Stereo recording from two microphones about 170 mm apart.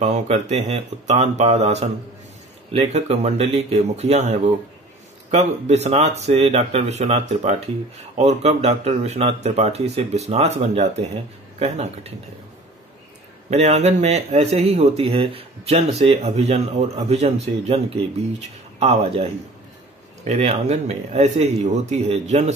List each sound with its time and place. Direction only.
0.0 s speech: 40° right (ahead or behind)
13.5 s speech: 40° right (ahead or behind)
20.2 s speech: 40° right (ahead or behind)